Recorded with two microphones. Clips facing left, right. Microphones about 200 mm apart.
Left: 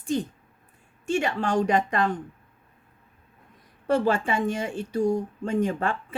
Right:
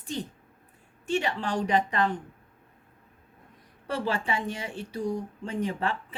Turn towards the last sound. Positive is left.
turn(degrees=50)  # may be behind; listen again after turning